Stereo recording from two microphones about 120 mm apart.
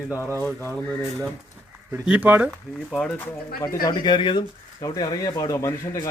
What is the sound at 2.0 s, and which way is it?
Speech, 15° right (ahead or behind).